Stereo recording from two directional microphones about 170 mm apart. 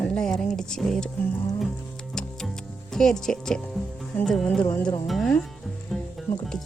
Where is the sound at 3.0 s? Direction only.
5° left (ahead or behind).